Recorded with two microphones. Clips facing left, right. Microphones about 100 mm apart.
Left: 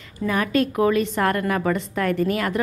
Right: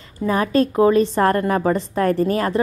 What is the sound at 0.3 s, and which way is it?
A woman's voice, 30° right (ahead or behind).